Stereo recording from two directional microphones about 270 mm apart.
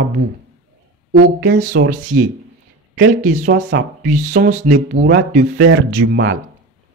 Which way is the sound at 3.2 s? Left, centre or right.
Right.